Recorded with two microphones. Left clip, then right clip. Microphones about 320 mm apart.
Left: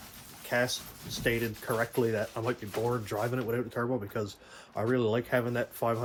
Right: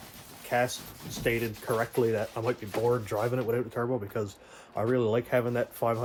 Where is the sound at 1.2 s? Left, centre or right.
Centre.